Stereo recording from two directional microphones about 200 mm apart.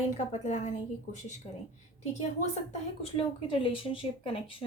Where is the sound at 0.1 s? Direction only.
35° left (ahead or behind).